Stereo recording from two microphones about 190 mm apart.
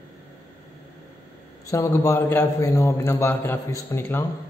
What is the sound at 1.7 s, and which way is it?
A man's voice, 15° left (ahead or behind).